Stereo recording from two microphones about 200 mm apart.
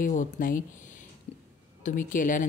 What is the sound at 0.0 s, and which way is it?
Speech, 40° left (ahead or behind).